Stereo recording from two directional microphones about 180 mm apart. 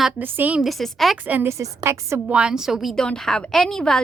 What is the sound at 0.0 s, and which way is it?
A woman's voice, 10° right (ahead or behind).